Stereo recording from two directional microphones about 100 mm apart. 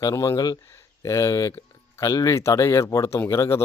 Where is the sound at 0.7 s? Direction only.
30° left (ahead or behind).